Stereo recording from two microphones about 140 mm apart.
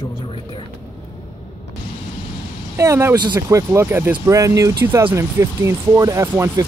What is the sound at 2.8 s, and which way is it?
Speech, 20° right (ahead or behind).